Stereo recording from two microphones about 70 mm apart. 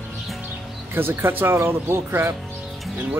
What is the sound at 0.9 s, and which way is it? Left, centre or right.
Speech, right.